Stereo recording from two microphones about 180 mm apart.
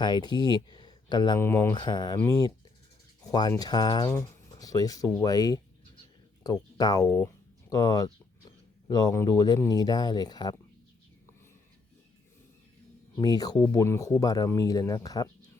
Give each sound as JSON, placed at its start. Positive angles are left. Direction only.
{"t": 0.0, "sound": "speech", "side_deg": 25}
{"t": 13.2, "sound": "speech", "side_deg": 20}